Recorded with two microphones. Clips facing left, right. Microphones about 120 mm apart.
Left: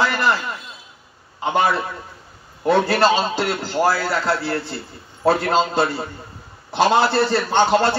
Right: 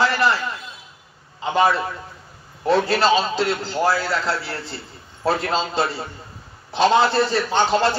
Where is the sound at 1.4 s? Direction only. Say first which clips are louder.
Even; 60° left (ahead or behind).